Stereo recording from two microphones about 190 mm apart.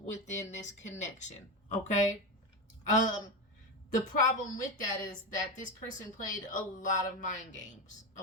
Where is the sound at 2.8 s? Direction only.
40° left (ahead or behind).